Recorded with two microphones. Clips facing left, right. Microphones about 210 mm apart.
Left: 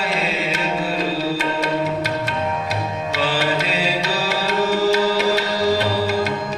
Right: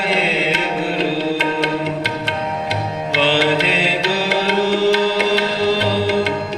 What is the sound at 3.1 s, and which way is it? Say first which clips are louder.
Music: right 5 dB; 75° right (ahead or behind).